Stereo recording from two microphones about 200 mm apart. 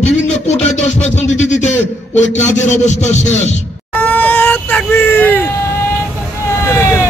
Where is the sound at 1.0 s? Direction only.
35° left (ahead or behind).